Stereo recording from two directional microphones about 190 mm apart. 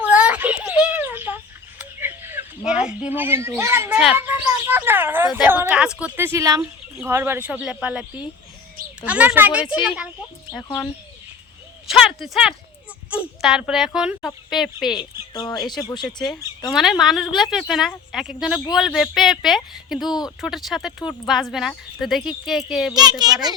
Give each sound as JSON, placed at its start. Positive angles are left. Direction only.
{"t": 0.0, "sound": "a sound", "side_deg": -5}
{"t": 3.2, "sound": "a child's voice", "side_deg": -10}
{"t": 10.6, "sound": "speech", "side_deg": 15}
{"t": 11.9, "sound": "speech", "side_deg": 0}
{"t": 15.3, "sound": "speech", "side_deg": 20}
{"t": 16.7, "sound": "speech", "side_deg": 0}
{"t": 20.1, "sound": "speech", "side_deg": 20}
{"t": 20.4, "sound": "speech", "side_deg": 0}
{"t": 23.0, "sound": "a child's voice", "side_deg": -20}